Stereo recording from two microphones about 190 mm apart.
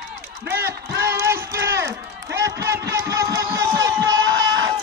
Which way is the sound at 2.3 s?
15° right (ahead or behind).